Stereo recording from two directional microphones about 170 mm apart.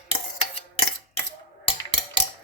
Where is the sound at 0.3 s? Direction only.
40° left (ahead or behind).